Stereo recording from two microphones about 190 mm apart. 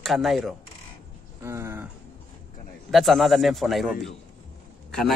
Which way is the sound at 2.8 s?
Centre (ahead or behind).